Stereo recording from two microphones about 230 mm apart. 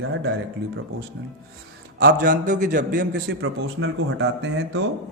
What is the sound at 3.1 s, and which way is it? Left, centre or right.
Speech, right.